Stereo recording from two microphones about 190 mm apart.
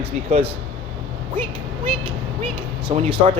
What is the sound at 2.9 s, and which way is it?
Speech, 35° right (ahead or behind).